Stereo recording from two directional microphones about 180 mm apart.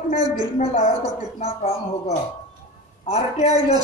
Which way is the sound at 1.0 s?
35° left (ahead or behind).